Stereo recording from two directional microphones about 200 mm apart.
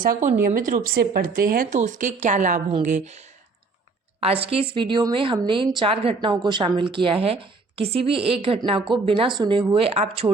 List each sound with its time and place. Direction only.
0.0 s a woman's voice: 40° right (ahead or behind)